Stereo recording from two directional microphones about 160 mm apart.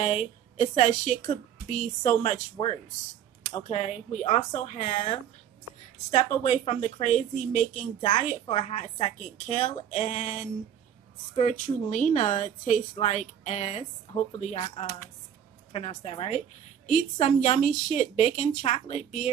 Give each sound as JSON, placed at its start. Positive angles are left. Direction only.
{"t": 0.0, "sound": "a woman's voice", "side_deg": 45}
{"t": 2.5, "sound": "a woman's voice", "side_deg": 35}
{"t": 6.1, "sound": "a woman's voice", "side_deg": 45}
{"t": 9.8, "sound": "a woman's voice", "side_deg": 50}